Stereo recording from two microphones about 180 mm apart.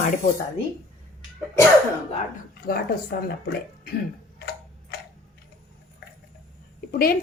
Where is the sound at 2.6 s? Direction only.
60° left (ahead or behind).